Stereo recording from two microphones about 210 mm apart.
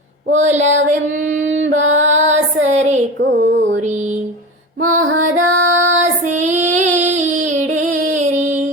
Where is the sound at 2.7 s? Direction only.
35° right (ahead or behind).